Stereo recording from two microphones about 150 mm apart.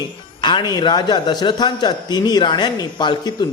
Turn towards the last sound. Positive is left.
turn(degrees=30)  # may be behind; listen again after turning